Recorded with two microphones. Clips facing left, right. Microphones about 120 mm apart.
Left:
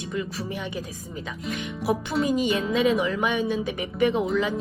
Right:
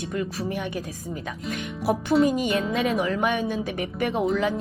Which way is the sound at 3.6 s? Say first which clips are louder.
Even; 55° right (ahead or behind).